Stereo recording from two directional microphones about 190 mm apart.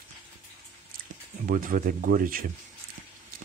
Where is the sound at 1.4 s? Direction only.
45° right (ahead or behind).